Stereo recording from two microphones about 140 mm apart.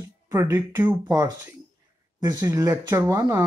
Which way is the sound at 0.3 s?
20° right (ahead or behind).